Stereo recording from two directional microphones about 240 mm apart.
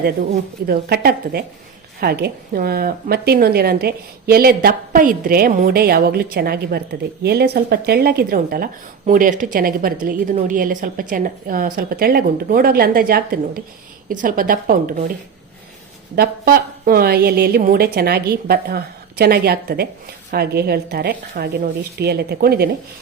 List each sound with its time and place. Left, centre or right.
0.7 s a woman's voice: right
16.1 s a woman's voice: right